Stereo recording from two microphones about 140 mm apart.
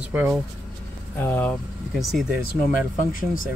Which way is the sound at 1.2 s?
10° left (ahead or behind).